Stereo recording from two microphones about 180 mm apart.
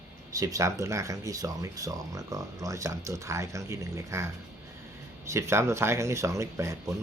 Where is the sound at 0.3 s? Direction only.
20° right (ahead or behind).